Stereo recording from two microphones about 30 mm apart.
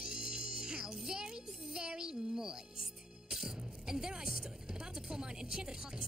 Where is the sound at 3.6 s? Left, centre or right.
Right.